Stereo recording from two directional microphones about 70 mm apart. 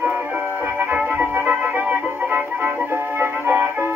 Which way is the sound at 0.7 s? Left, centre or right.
Right.